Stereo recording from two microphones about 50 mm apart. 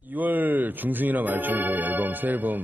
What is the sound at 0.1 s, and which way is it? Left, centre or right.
Speech, right.